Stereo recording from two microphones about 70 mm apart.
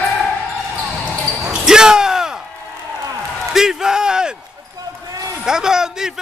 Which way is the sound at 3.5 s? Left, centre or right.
Centre.